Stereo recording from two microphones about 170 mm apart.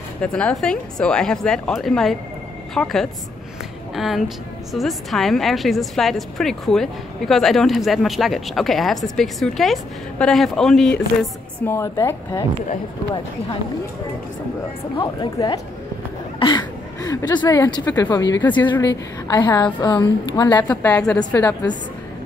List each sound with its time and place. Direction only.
0.2 s a woman's voice: 5° left (ahead or behind)
11.6 s speech: 15° left (ahead or behind)
15.0 s a woman's voice: 25° left (ahead or behind)
18.4 s speech: 10° left (ahead or behind)
18.7 s a woman's voice: 25° left (ahead or behind)
20.7 s speech: 10° left (ahead or behind)